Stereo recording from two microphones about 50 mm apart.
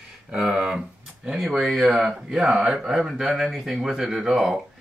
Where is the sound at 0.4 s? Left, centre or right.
Centre.